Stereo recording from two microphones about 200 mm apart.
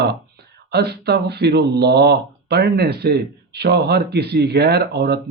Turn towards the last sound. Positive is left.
turn(degrees=-55)  # may be behind; listen again after turning